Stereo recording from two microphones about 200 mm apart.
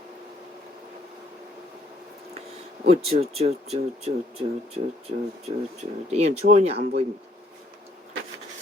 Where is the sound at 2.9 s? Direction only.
30° right (ahead or behind).